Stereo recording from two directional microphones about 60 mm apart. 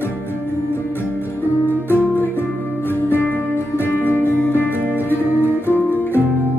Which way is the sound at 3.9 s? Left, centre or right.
Left.